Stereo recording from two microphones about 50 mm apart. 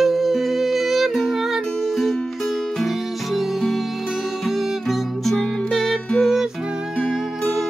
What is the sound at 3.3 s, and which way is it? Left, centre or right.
Music, centre.